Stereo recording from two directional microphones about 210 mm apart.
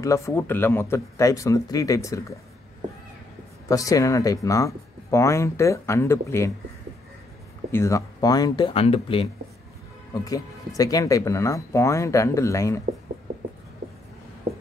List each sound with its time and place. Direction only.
0.0 s speech: 15° left (ahead or behind)
3.6 s speech: 15° left (ahead or behind)
7.7 s speech: 15° left (ahead or behind)
10.8 s speech: 15° left (ahead or behind)